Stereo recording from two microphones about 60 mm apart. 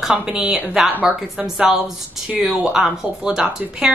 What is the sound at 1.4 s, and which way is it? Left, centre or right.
A woman's voice, centre.